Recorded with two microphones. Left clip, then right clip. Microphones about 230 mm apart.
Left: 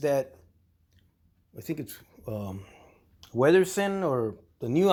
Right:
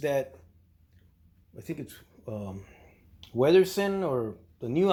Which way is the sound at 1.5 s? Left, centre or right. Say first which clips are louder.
Left 3 dB; left.